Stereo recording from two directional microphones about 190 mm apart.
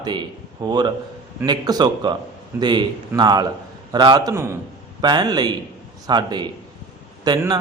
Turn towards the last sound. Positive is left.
turn(degrees=-20)  # may be behind; listen again after turning